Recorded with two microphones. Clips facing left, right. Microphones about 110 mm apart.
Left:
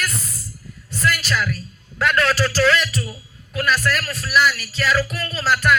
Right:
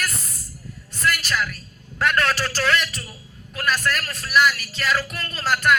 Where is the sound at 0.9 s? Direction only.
45° right (ahead or behind).